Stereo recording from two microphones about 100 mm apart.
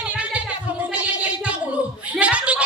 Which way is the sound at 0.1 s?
15° right (ahead or behind).